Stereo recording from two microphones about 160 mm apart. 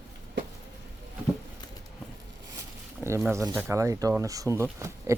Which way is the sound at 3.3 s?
15° right (ahead or behind).